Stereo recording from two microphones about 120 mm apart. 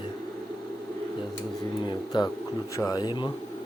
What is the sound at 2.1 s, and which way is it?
Speech, 40° left (ahead or behind).